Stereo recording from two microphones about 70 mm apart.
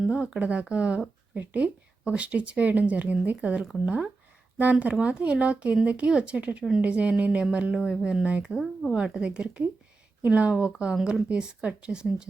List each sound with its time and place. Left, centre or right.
0.3 s speech: centre